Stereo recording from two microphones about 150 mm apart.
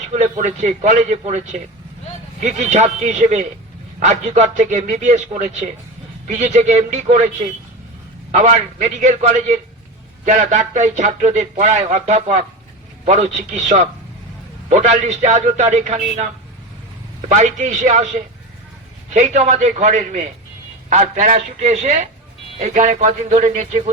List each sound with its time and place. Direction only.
0.1 s speech: 50° right (ahead or behind)